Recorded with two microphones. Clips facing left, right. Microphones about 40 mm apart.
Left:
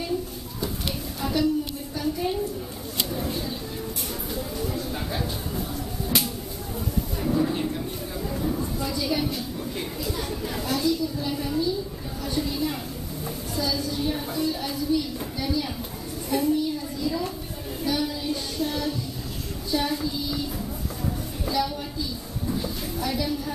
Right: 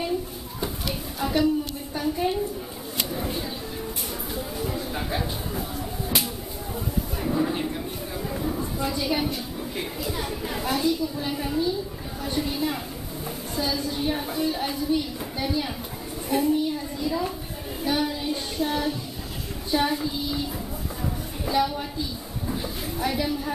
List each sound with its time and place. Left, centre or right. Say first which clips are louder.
1.2 s a sound: right 1 dB; centre
3.1 s a sound: left 1 dB; centre
9.8 s speech: right 2 dB; centre
12.2 s chatter: even; right
13.6 s a child's voice: even; right
17.8 s child singing: right 1 dB; right
19.7 s speech: right 2 dB; right
21.5 s speech: right 3 dB; right
22.5 s a sound: left 1 dB; right